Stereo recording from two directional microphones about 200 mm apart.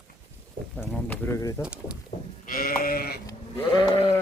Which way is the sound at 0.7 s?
5° left (ahead or behind).